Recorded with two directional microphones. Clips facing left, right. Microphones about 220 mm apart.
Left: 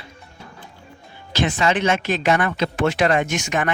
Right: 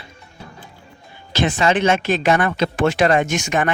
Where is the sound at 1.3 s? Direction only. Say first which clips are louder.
Right 2 dB; 25° right (ahead or behind); by 3.4 s 45° right (ahead or behind).